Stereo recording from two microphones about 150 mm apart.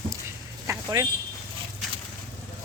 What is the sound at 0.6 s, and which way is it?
Vehicle, 25° right (ahead or behind).